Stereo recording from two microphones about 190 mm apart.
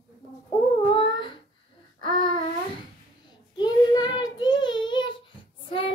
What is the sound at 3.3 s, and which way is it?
Child singing, 20° left (ahead or behind).